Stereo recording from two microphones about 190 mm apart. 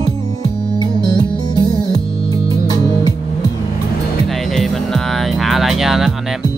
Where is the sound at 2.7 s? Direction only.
20° left (ahead or behind).